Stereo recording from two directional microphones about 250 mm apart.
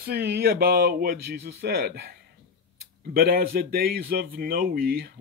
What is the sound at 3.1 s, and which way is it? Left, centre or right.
Speech, right.